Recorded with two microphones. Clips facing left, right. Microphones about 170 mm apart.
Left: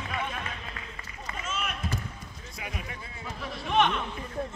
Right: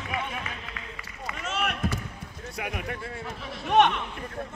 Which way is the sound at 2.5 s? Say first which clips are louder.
Right 6 dB; 65° right (ahead or behind).